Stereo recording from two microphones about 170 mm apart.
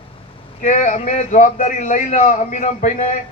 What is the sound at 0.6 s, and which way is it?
A man's voice, 45° left (ahead or behind).